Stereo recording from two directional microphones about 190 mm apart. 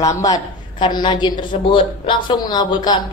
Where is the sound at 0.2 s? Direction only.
20° left (ahead or behind).